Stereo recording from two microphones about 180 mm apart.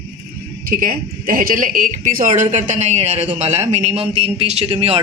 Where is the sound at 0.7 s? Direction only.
55° right (ahead or behind).